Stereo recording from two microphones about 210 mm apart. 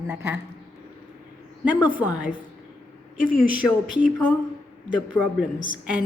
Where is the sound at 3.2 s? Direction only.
40° left (ahead or behind).